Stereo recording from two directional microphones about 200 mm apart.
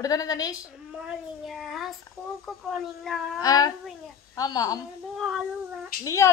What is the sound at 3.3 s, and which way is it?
A child's voice, 20° left (ahead or behind).